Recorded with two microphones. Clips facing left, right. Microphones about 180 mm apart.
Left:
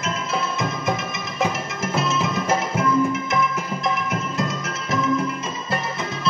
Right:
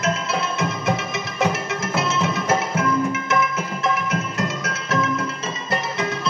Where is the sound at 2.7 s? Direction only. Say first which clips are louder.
Left 1 dB; 75° right (ahead or behind).